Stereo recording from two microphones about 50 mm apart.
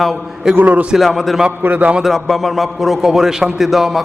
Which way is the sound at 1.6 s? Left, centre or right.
Right.